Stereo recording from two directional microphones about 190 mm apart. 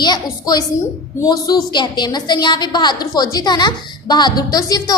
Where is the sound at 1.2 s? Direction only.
20° left (ahead or behind).